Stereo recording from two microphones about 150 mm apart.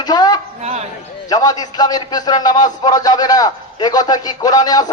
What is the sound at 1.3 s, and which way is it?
A man's voice, 25° left (ahead or behind).